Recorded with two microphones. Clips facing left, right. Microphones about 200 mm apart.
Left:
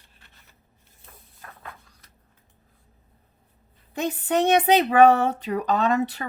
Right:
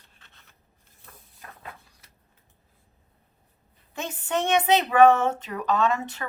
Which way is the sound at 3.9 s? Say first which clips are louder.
Left 5 dB; 35° left (ahead or behind).